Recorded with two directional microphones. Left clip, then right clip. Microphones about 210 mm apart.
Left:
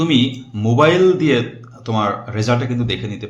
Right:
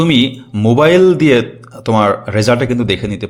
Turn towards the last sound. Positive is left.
turn(degrees=-45)  # may be behind; listen again after turning